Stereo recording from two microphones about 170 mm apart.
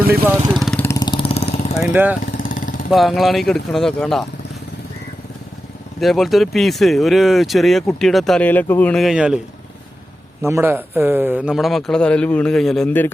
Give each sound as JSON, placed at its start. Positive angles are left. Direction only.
{"t": 0.1, "sound": "speech", "side_deg": -10}
{"t": 0.5, "sound": "vehicle", "side_deg": 0}
{"t": 0.9, "sound": "vehicle", "side_deg": 25}
{"t": 1.9, "sound": "speech", "side_deg": -10}
{"t": 2.2, "sound": "vehicle", "side_deg": 50}
{"t": 2.9, "sound": "speech", "side_deg": 0}
{"t": 6.0, "sound": "speech", "side_deg": 0}
{"t": 10.4, "sound": "speech", "side_deg": -15}